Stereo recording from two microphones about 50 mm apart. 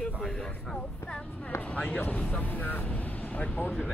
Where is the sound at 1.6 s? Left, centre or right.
Left.